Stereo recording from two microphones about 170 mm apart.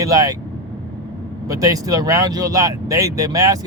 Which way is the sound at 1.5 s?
20° right (ahead or behind).